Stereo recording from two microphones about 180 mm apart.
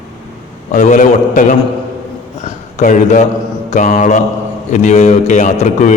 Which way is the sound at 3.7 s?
45° left (ahead or behind).